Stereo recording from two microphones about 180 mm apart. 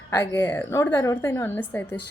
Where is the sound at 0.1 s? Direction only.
15° left (ahead or behind).